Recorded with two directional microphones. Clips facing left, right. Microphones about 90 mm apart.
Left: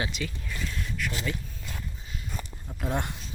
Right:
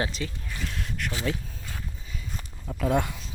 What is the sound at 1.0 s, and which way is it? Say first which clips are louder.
Speech: even; 65° right (ahead or behind).